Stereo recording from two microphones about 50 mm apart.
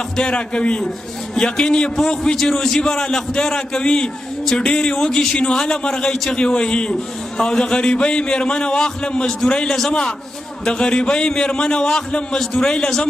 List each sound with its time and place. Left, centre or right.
0.2 s a man's voice: left